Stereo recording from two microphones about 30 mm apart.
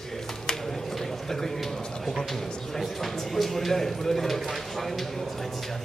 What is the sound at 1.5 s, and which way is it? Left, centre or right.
Speech, centre.